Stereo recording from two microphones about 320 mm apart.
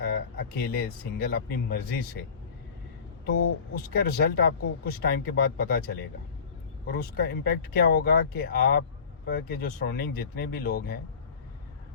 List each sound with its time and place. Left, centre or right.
0.0 s speech: left
3.8 s speech: left